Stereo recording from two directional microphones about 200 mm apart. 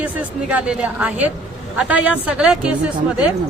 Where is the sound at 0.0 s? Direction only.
5° right (ahead or behind).